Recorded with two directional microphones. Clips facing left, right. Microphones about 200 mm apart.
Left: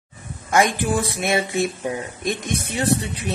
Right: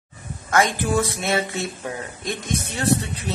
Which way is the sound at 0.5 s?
15° left (ahead or behind).